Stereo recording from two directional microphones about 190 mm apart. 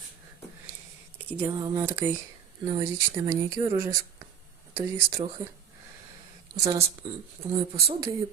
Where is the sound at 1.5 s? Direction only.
20° right (ahead or behind).